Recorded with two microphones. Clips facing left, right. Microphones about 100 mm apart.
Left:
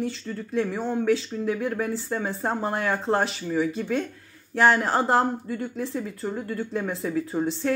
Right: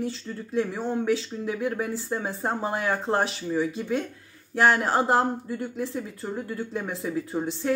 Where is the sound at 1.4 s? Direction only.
15° right (ahead or behind).